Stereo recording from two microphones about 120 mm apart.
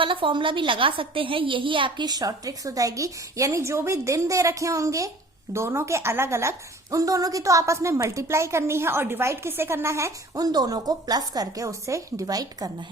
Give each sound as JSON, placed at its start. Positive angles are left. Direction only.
{"t": 0.0, "sound": "a woman's voice", "side_deg": -45}